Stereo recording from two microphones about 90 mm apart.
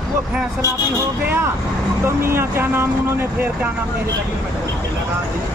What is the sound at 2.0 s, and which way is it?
Speech, 30° right (ahead or behind).